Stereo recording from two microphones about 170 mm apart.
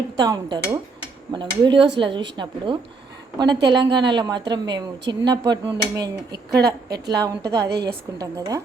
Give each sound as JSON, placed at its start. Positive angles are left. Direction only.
{"t": 0.2, "sound": "speech", "side_deg": -25}
{"t": 7.6, "sound": "a woman's voice", "side_deg": -75}
{"t": 8.2, "sound": "speech", "side_deg": -20}